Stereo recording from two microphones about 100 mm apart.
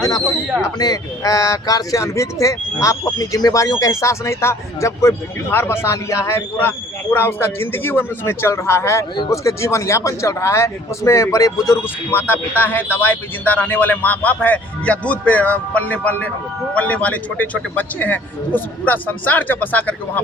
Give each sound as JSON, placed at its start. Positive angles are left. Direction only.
{"t": 0.6, "sound": "speech", "side_deg": 40}
{"t": 11.8, "sound": "speech", "side_deg": 20}